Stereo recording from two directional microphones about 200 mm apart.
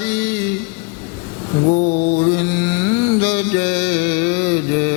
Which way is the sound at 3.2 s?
15° left (ahead or behind).